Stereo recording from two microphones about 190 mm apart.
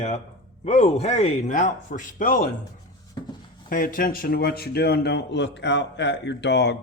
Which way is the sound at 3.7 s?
45° left (ahead or behind).